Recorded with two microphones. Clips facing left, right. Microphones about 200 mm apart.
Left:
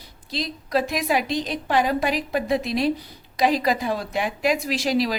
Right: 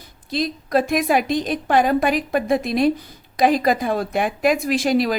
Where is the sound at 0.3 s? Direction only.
50° right (ahead or behind).